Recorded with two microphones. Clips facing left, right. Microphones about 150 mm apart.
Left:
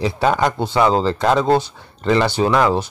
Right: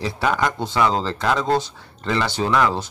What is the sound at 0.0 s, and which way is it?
A man's voice, 25° left (ahead or behind).